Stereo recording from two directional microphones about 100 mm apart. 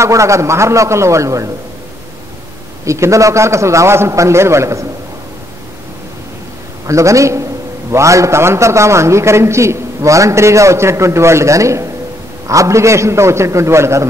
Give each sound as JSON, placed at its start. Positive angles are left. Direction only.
{"t": 0.0, "sound": "a man's voice", "side_deg": -30}
{"t": 2.8, "sound": "a man's voice", "side_deg": -30}
{"t": 6.9, "sound": "a man's voice", "side_deg": -30}